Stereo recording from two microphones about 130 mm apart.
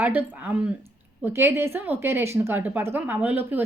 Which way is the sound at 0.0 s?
15° right (ahead or behind).